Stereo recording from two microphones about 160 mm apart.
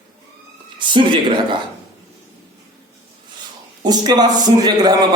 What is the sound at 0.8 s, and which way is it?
Speech, 30° right (ahead or behind).